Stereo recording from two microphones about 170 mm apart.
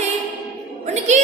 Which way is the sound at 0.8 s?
45° right (ahead or behind).